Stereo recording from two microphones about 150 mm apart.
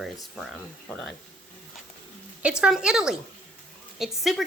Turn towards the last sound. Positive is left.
turn(degrees=0)  # may be behind; listen again after turning